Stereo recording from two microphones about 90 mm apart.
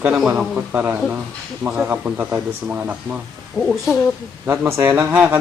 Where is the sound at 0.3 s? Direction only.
15° right (ahead or behind).